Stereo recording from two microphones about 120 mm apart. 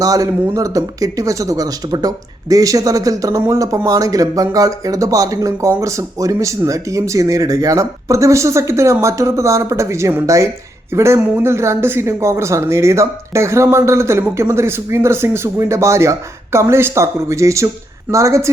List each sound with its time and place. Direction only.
0.0 s speech: 30° right (ahead or behind)